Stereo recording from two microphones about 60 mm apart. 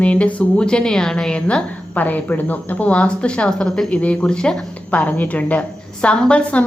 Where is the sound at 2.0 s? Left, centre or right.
Left.